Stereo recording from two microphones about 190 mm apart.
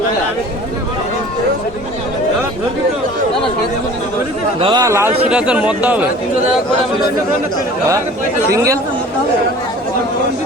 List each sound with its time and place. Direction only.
4.6 s speech: 20° right (ahead or behind)
8.4 s speech: 15° right (ahead or behind)